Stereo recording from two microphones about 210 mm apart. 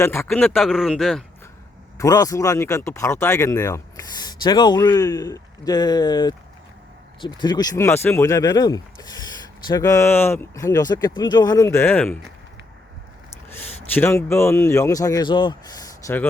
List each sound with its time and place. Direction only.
0.0 s speech: 10° left (ahead or behind)
0.3 s speech: centre (ahead or behind)
2.0 s speech: 15° left (ahead or behind)
13.3 s speech: 10° left (ahead or behind)